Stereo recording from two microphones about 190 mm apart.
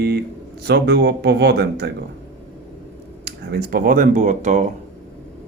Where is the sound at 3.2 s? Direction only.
55° right (ahead or behind); by 4.6 s 40° right (ahead or behind).